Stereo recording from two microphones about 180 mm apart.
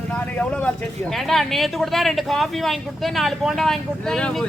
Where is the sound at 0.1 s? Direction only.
5° left (ahead or behind).